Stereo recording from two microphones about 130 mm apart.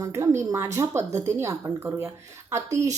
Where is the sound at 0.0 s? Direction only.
20° right (ahead or behind).